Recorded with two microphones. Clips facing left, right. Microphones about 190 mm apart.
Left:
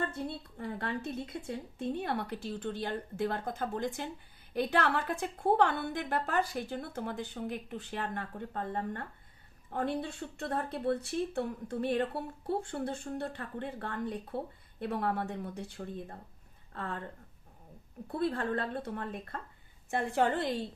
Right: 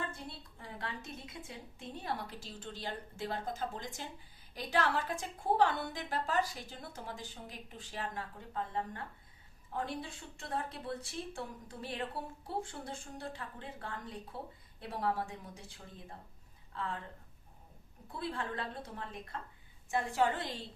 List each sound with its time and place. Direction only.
0.6 s speech: 60° left (ahead or behind)
16.7 s speech: 60° left (ahead or behind)
18.1 s speech: 60° left (ahead or behind)